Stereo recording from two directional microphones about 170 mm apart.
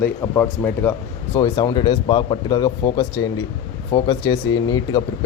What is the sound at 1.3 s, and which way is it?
Speech, 25° left (ahead or behind).